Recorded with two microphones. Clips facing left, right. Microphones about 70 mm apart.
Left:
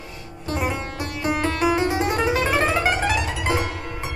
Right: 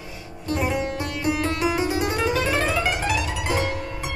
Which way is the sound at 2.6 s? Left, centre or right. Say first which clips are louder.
Left 3 dB; left.